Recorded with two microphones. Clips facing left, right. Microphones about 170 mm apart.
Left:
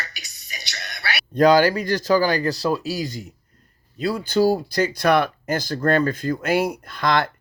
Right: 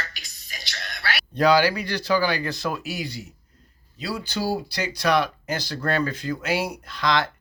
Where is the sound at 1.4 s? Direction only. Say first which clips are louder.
Left 4 dB; 45° left (ahead or behind).